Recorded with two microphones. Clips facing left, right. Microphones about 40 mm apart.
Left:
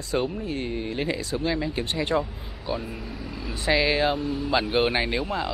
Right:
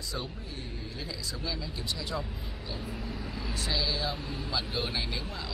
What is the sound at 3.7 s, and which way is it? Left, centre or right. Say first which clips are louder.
Speech: left 12 dB; left.